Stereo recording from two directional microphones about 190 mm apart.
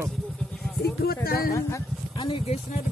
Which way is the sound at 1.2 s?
50° left (ahead or behind).